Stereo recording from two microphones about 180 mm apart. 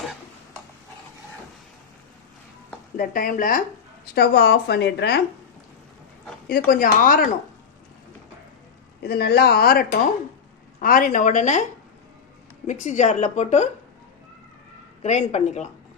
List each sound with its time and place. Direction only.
3.0 s speech: 50° left (ahead or behind)
4.1 s speech: 60° left (ahead or behind)
6.7 s speech: 50° left (ahead or behind)
9.0 s speech: 65° left (ahead or behind); by 11.6 s 45° left (ahead or behind)
12.6 s a woman's voice: 45° left (ahead or behind)
15.0 s a woman's voice: 40° left (ahead or behind)